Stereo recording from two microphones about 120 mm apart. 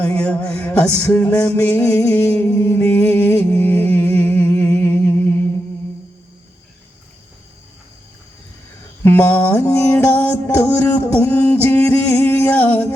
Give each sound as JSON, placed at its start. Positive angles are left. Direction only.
{"t": 0.0, "sound": "music", "side_deg": 10}
{"t": 9.0, "sound": "music", "side_deg": 15}